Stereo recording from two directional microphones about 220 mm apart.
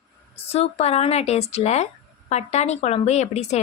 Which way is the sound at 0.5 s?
30° left (ahead or behind).